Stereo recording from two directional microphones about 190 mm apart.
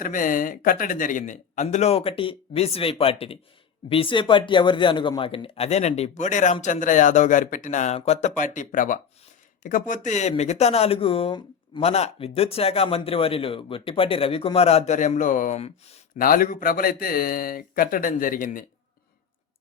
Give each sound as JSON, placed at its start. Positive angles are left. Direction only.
{"t": 0.0, "sound": "speech", "side_deg": 45}
{"t": 16.1, "sound": "speech", "side_deg": 50}